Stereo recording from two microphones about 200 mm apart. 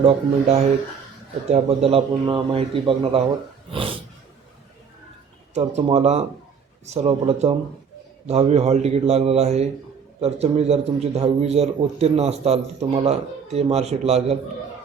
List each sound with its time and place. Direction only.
0.0 s a man's voice: 30° right (ahead or behind)
5.5 s a man's voice: 30° right (ahead or behind)